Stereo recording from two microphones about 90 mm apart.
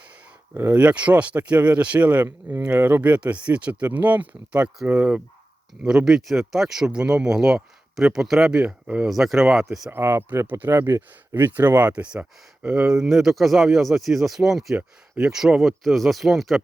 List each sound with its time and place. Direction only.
0.5 s speech: 20° right (ahead or behind)
9.0 s speech: centre (ahead or behind)
9.9 s speech: 25° right (ahead or behind)
13.0 s speech: centre (ahead or behind)